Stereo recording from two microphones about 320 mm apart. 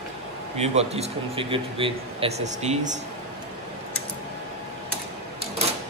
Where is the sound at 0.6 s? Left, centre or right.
Centre.